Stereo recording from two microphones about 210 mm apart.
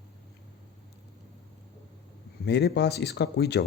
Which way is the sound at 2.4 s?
55° left (ahead or behind).